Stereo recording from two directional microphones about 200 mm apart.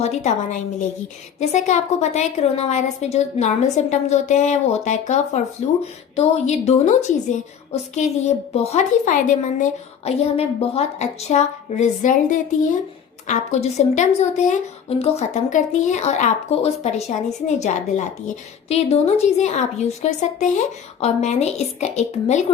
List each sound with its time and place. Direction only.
0.0 s speech: 35° left (ahead or behind)